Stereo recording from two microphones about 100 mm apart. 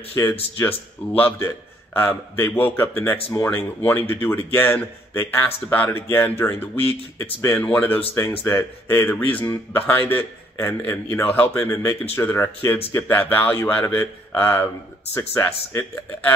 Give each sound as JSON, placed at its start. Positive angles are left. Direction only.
{"t": 0.1, "sound": "speech", "side_deg": 25}